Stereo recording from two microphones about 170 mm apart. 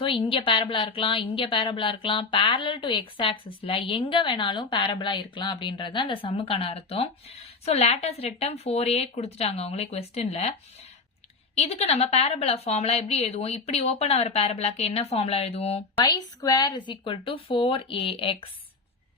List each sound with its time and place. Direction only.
0.0 s a woman's voice: 30° left (ahead or behind)
11.5 s a woman's voice: 40° left (ahead or behind)
16.0 s a woman's voice: 25° left (ahead or behind)